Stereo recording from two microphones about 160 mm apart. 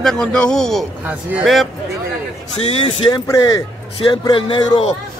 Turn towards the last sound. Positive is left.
turn(degrees=30)  # may be behind; listen again after turning